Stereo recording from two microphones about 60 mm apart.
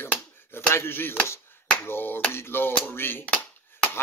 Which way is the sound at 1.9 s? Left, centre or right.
Left.